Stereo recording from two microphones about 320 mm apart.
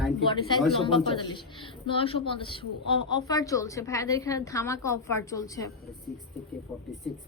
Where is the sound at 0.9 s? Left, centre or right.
Centre.